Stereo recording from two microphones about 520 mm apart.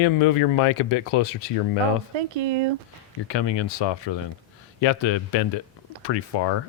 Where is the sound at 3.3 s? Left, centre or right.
Left.